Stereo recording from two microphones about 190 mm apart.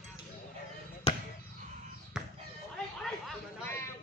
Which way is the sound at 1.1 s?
30° left (ahead or behind).